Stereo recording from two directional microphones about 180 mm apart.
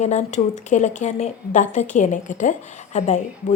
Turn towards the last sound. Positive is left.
turn(degrees=40)  # may be behind; listen again after turning